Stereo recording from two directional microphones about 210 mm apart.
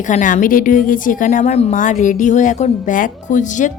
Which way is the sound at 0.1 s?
35° left (ahead or behind).